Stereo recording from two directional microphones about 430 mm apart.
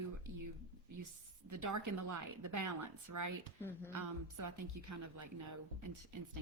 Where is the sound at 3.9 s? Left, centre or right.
Right.